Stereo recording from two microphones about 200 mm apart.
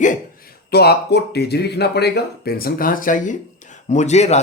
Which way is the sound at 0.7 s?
55° left (ahead or behind).